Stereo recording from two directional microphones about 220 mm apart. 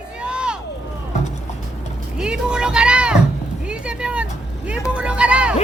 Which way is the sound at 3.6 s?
5° right (ahead or behind).